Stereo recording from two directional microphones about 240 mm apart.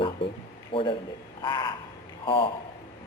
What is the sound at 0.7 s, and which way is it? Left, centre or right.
A man's voice, left.